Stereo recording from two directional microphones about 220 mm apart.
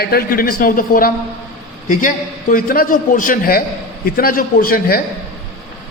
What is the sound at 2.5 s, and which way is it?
A man's voice, 40° left (ahead or behind).